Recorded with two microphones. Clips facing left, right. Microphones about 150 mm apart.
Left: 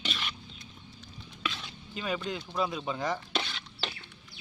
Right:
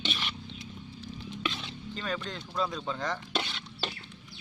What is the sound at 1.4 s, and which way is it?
Stir, 25° right (ahead or behind).